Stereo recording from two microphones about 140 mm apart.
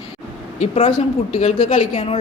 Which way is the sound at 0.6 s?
55° left (ahead or behind).